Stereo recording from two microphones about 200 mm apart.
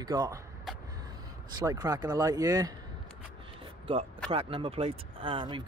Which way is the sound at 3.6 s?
25° right (ahead or behind).